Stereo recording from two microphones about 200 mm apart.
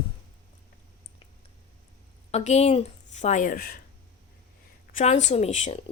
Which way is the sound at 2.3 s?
35° left (ahead or behind).